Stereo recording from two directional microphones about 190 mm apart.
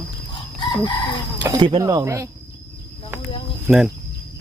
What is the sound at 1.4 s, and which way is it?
Speech, 25° right (ahead or behind).